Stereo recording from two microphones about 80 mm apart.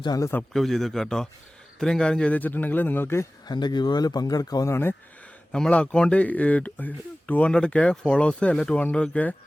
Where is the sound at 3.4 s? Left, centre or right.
Left.